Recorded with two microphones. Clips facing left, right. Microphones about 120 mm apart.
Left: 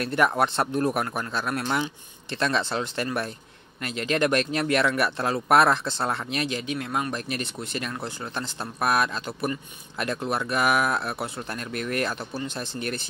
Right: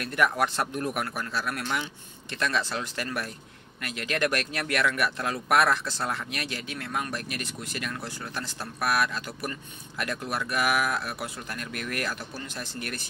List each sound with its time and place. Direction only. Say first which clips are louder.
0.0 s speech: left 3 dB; 30° left (ahead or behind)